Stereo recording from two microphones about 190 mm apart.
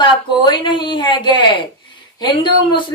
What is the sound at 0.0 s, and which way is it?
A woman's voice, 25° left (ahead or behind).